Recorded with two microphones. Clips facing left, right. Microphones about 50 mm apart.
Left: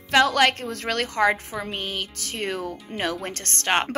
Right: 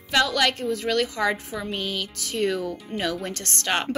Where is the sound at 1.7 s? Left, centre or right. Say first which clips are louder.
Right 1 dB; left.